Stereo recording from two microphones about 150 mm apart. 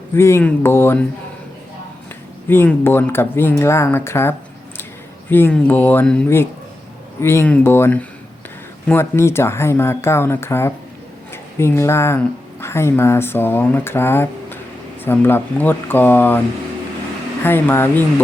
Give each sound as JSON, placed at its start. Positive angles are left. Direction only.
{"t": 0.1, "sound": "speech", "side_deg": 15}
{"t": 2.5, "sound": "speech", "side_deg": 15}
{"t": 17.4, "sound": "speech", "side_deg": 15}